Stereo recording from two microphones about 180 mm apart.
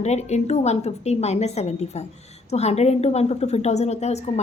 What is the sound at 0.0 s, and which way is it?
A woman's voice, 40° left (ahead or behind).